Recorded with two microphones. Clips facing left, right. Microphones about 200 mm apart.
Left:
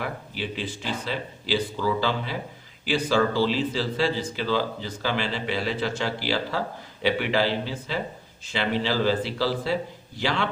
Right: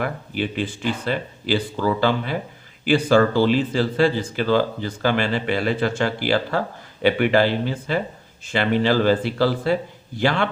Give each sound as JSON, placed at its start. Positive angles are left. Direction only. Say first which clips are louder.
{"t": 0.0, "sound": "speech", "louder": "right 6 dB", "side_deg": -55}